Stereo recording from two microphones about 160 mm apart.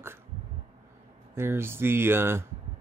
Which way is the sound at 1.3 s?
15° right (ahead or behind).